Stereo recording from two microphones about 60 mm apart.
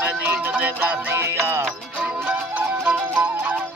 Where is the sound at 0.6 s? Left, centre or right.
Right.